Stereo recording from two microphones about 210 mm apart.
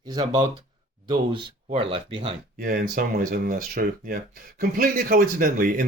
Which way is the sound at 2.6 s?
45° right (ahead or behind).